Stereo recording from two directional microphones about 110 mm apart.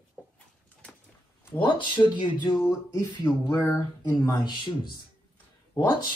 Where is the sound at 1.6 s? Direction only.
45° left (ahead or behind).